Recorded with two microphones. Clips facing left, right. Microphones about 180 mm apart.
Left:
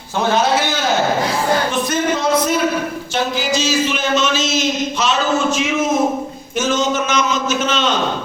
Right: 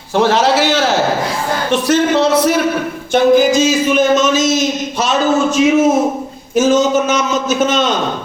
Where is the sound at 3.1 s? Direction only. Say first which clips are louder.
Right 12 dB; 55° right (ahead or behind).